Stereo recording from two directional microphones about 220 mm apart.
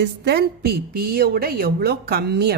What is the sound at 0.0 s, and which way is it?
A woman's voice, 45° right (ahead or behind).